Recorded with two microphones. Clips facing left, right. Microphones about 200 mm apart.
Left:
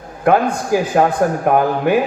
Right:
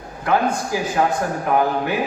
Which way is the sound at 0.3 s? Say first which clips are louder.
Left 5 dB; 55° left (ahead or behind).